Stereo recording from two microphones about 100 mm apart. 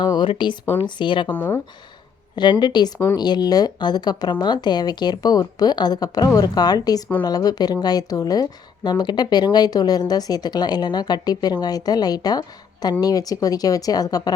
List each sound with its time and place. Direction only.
0.0 s speech: 50° left (ahead or behind)
1.3 s speech: 25° left (ahead or behind)
2.3 s speech: 50° left (ahead or behind)